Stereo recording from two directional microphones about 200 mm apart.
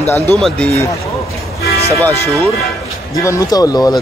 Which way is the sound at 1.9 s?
15° left (ahead or behind).